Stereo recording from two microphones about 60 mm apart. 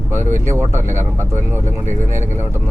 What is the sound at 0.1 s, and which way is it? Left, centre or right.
Speech, right.